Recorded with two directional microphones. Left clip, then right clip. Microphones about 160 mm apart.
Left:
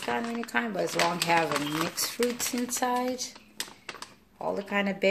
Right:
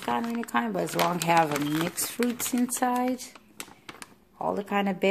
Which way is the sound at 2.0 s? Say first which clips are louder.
Left 1 dB; 80° right.